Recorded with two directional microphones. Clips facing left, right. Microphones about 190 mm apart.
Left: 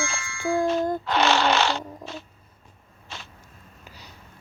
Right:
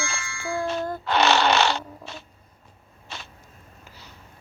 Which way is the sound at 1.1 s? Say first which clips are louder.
Right 2 dB; 70° right (ahead or behind).